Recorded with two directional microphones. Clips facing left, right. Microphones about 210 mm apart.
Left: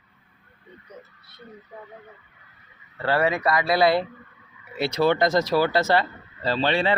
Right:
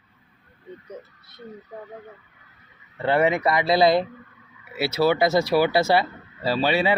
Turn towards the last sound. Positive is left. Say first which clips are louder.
# right 1 dB
turn(degrees=-10)  # may be behind; listen again after turning